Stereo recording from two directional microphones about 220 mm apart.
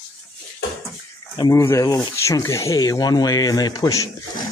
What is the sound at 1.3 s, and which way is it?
Speech, 15° left (ahead or behind).